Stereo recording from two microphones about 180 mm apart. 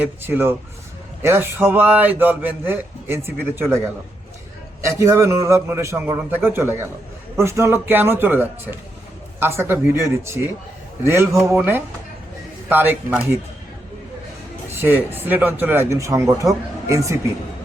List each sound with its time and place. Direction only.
0.0 s speech: 10° right (ahead or behind)
4.9 s speech: 15° right (ahead or behind)
14.7 s speech: 10° right (ahead or behind)